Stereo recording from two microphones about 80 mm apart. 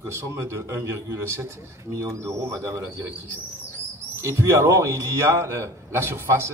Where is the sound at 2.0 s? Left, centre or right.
Right.